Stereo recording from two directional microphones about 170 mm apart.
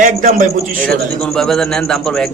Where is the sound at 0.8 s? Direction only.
5° left (ahead or behind).